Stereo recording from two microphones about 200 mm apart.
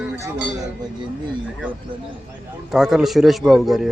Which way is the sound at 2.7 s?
5° right (ahead or behind).